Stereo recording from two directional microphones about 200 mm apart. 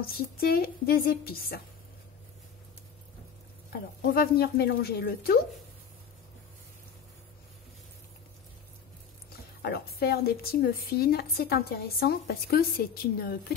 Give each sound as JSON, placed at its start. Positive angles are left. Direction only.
{"t": 0.0, "sound": "speech", "side_deg": 50}
{"t": 4.1, "sound": "speech", "side_deg": 50}
{"t": 9.6, "sound": "speech", "side_deg": 50}